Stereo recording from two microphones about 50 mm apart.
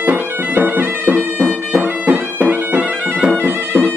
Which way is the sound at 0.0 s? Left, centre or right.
Right.